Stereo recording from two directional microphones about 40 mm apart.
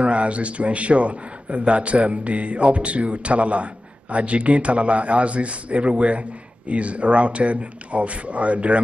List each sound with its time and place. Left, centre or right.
0.0 s a man's voice: right